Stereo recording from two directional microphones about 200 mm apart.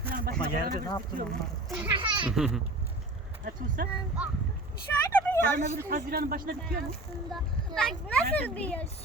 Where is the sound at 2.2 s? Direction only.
5° right (ahead or behind).